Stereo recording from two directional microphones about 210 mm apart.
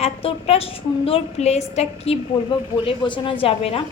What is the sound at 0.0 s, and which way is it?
A woman's voice, 30° left (ahead or behind).